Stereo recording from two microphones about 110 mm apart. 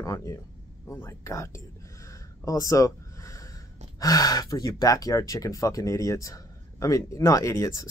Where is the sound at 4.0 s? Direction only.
35° left (ahead or behind).